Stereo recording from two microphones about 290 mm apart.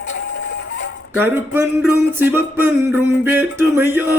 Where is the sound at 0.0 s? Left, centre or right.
Left.